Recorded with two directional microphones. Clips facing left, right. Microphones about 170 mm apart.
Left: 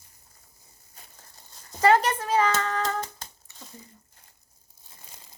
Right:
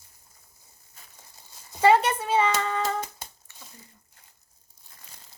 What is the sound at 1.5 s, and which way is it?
Hands, 10° right (ahead or behind).